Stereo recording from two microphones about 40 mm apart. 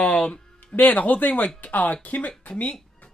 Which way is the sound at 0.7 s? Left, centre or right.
Left.